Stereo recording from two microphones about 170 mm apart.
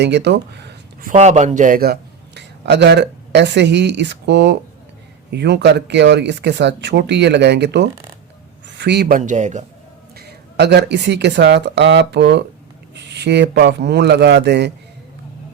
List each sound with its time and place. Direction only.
0.0 s speech: 90° right
1.1 s a man's voice: 40° right (ahead or behind); by 7.9 s 90° right
8.6 s a sound: 85° right
9.1 s a man's voice: 45° right (ahead or behind)
10.2 s a man's voice: 75° right (ahead or behind)